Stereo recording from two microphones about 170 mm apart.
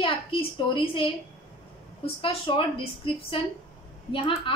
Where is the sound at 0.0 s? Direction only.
30° left (ahead or behind).